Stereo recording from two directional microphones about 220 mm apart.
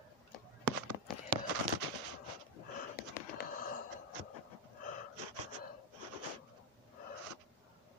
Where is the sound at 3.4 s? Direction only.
40° left (ahead or behind).